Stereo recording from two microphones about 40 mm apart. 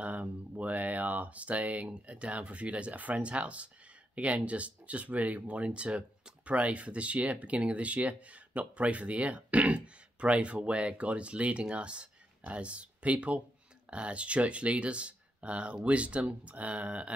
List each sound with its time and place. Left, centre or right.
0.0 s speech: right